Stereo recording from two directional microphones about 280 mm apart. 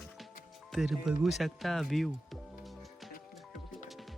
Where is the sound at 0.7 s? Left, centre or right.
Centre.